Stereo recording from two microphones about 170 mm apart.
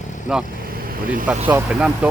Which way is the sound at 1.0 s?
55° right (ahead or behind).